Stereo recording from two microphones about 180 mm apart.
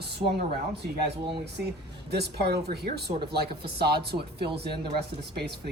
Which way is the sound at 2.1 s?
65° right (ahead or behind).